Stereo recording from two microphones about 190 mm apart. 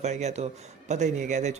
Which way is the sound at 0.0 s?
35° right (ahead or behind).